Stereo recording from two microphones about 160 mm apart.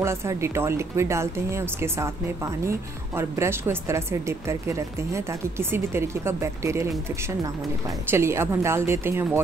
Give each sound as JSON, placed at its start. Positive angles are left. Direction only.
{"t": 0.0, "sound": "speech", "side_deg": -15}
{"t": 8.1, "sound": "speech", "side_deg": -15}